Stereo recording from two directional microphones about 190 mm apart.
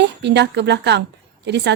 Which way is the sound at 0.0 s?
65° right (ahead or behind).